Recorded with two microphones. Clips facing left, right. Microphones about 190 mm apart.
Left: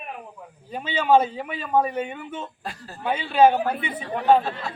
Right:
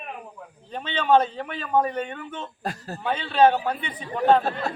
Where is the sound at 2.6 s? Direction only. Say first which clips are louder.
Right 5 dB; 45° right (ahead or behind).